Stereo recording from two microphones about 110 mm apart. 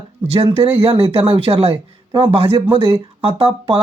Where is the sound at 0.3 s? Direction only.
60° right (ahead or behind).